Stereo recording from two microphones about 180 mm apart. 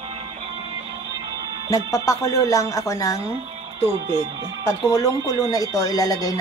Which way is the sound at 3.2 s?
30° right (ahead or behind).